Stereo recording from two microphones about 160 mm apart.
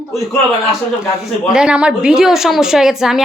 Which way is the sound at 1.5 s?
5° right (ahead or behind).